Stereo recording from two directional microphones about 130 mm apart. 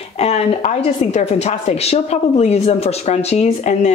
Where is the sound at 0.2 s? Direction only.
60° left (ahead or behind).